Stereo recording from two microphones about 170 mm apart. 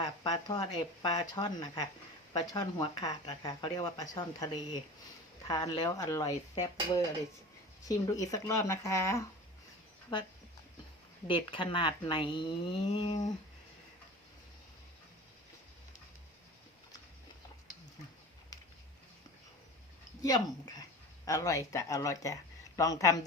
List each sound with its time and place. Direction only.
0.3 s speech: 25° left (ahead or behind)
5.5 s speech: 25° left (ahead or behind)
10.1 s speech: 25° left (ahead or behind)
11.3 s speech: 30° left (ahead or behind)
18.5 s a sound: 20° left (ahead or behind)
20.2 s speech: 20° left (ahead or behind)